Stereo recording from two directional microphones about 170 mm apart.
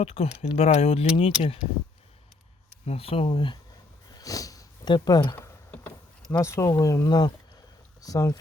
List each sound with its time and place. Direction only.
0.0 s speech: 35° left (ahead or behind)
2.8 s speech: 35° left (ahead or behind)
4.2 s sniff: 20° left (ahead or behind)
8.0 s speech: 20° left (ahead or behind)